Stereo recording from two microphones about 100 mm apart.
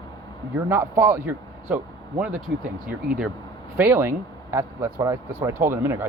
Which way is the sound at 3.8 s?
25° right (ahead or behind).